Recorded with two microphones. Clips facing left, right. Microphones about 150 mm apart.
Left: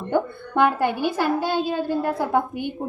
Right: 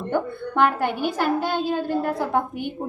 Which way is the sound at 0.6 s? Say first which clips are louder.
Left 1 dB; 15° left (ahead or behind).